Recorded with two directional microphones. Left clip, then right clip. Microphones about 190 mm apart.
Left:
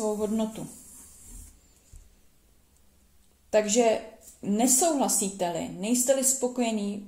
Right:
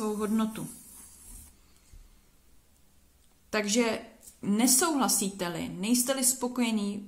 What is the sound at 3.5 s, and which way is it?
A woman's voice, 40° right (ahead or behind).